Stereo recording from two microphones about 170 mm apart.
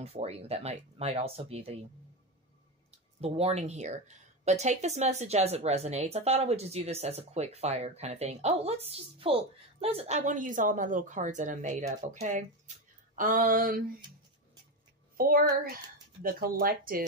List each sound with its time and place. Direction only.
0.0 s speech: 35° right (ahead or behind)
2.9 s speech: 35° right (ahead or behind); by 13.8 s 55° right (ahead or behind)
15.1 s speech: 60° right (ahead or behind)